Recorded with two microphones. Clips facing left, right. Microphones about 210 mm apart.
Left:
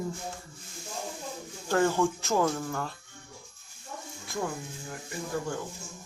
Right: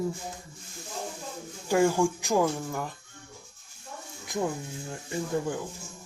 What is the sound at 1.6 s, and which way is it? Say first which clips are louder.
Speech: right 2 dB; 10° right (ahead or behind).